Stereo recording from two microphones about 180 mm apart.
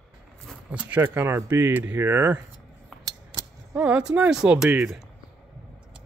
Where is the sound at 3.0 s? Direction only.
20° right (ahead or behind).